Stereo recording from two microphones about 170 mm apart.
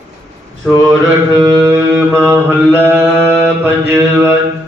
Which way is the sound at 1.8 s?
15° right (ahead or behind).